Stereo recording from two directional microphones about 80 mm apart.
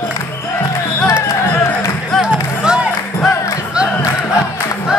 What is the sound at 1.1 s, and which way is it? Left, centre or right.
Music, left.